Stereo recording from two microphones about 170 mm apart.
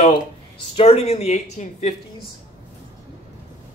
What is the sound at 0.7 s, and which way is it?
Speech, 40° left (ahead or behind).